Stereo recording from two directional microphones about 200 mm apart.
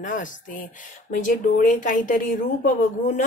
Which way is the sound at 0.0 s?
40° left (ahead or behind).